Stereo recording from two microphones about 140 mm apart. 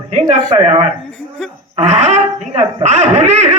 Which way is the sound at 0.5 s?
45° right (ahead or behind).